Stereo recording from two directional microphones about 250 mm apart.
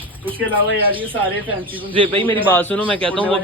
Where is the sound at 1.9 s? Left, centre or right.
Centre.